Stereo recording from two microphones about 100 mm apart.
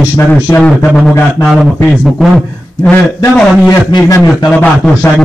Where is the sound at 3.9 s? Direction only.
45° left (ahead or behind).